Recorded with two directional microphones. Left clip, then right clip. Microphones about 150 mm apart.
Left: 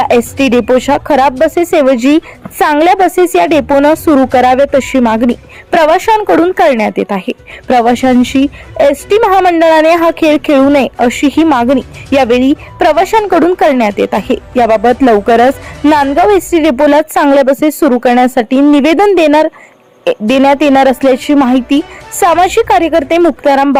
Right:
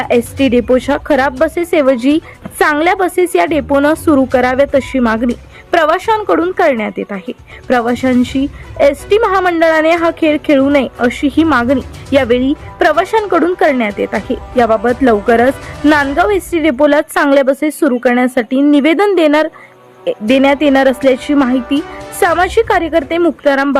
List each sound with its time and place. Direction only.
0.0 s speech: 25° left (ahead or behind)